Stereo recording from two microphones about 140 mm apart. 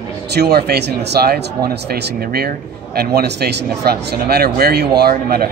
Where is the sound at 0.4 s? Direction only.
90° right.